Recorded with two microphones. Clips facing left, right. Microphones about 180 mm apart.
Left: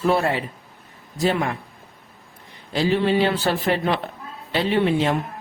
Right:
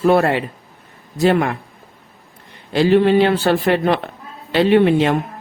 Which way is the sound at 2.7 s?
65° right (ahead or behind).